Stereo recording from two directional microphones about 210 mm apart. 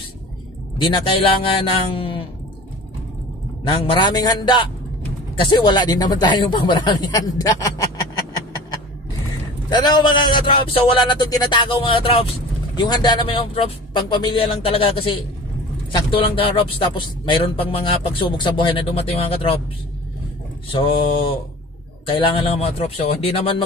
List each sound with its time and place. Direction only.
0.8 s a man's voice: 20° left (ahead or behind)
3.6 s a man's voice: 20° left (ahead or behind)
9.7 s a man's voice: 20° left (ahead or behind)
20.7 s a man's voice: 25° left (ahead or behind)